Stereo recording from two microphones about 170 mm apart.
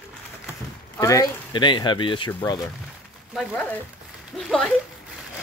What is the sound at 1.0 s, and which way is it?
Speech, 20° left (ahead or behind).